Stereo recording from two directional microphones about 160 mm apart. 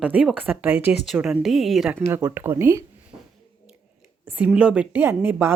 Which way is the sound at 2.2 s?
15° right (ahead or behind).